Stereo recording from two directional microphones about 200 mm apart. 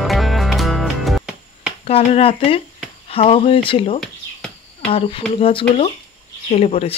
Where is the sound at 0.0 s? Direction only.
Centre (ahead or behind).